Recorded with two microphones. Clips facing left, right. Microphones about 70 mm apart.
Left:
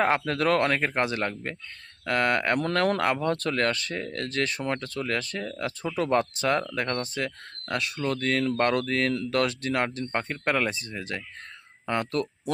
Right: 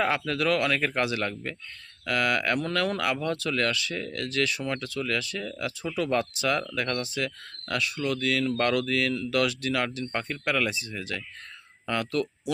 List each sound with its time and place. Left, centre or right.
0.0 s speech: left
2.6 s speech: left
8.0 s speech: left